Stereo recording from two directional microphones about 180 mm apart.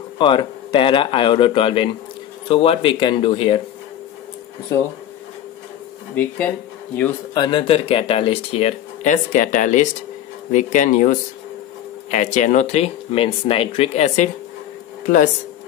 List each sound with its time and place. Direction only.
0.2 s speech: 25° left (ahead or behind)
6.1 s speech: 5° left (ahead or behind)
7.3 s speech: 25° left (ahead or behind)